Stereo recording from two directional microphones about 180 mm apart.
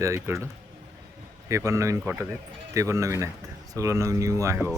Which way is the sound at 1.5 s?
15° right (ahead or behind).